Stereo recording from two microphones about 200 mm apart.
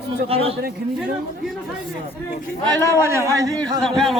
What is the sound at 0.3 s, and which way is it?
Speech, 30° right (ahead or behind).